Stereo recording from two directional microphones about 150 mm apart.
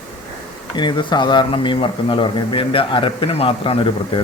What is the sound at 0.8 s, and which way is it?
Speech, 30° left (ahead or behind).